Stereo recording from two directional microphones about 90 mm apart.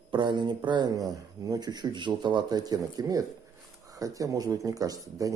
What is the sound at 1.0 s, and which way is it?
Speech, 45° right (ahead or behind).